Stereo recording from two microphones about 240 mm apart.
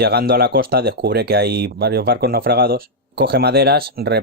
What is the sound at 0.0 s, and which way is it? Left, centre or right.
Speech, right.